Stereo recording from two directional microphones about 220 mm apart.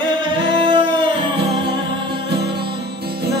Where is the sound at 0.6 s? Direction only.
20° right (ahead or behind).